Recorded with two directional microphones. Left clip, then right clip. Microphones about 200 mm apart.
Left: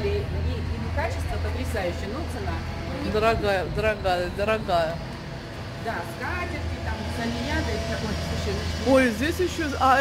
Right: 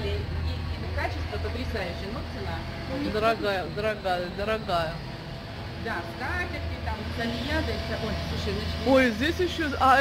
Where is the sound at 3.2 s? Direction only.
15° left (ahead or behind).